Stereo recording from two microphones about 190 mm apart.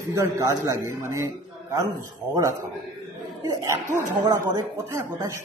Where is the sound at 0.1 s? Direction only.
15° right (ahead or behind).